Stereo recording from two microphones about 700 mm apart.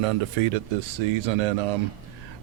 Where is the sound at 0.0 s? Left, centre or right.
Right.